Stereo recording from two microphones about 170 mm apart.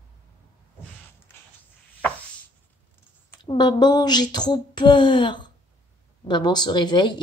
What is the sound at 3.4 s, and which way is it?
Speech, 25° left (ahead or behind).